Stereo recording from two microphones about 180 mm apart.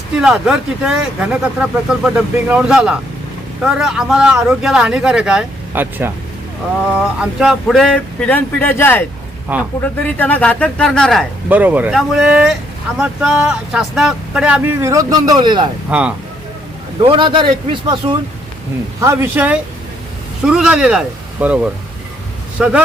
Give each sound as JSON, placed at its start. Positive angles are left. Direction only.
{"t": 0.2, "sound": "speech", "side_deg": -5}
{"t": 7.2, "sound": "speech", "side_deg": 0}
{"t": 9.5, "sound": "speech", "side_deg": -10}
{"t": 10.2, "sound": "speech", "side_deg": 10}
{"t": 15.9, "sound": "speech", "side_deg": -5}
{"t": 17.0, "sound": "a man's voice", "side_deg": -30}
{"t": 18.9, "sound": "speech", "side_deg": -15}